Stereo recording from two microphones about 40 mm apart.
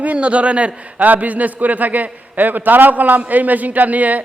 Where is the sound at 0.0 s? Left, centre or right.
Right.